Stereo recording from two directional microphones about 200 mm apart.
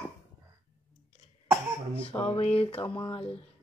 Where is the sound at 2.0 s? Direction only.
25° left (ahead or behind).